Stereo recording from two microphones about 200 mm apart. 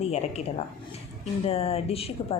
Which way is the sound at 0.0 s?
30° left (ahead or behind).